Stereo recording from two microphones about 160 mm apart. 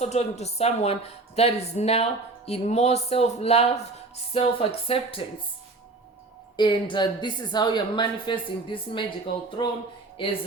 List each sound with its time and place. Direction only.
0.0 s speech: 45° left (ahead or behind)
6.6 s a woman's voice: 30° left (ahead or behind)
10.2 s speech: 30° left (ahead or behind)